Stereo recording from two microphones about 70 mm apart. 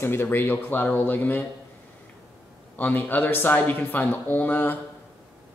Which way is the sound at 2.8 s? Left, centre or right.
Left.